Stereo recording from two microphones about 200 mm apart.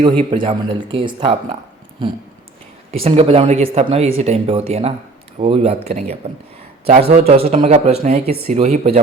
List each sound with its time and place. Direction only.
0.0 s speech: 25° right (ahead or behind)